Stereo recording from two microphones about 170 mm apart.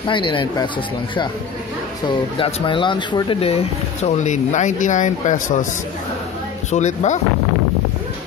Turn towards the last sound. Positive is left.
turn(degrees=45)  # may be behind; listen again after turning